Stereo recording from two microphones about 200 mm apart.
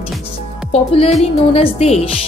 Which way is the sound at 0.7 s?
30° left (ahead or behind).